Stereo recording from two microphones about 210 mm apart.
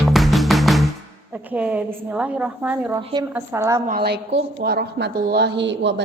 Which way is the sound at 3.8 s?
45° right (ahead or behind).